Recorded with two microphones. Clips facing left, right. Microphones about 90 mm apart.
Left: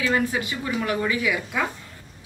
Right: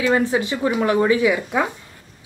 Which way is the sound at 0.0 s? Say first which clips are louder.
Right 5 dB; 30° right (ahead or behind).